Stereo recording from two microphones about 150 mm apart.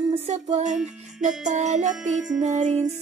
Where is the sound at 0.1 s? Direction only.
45° right (ahead or behind).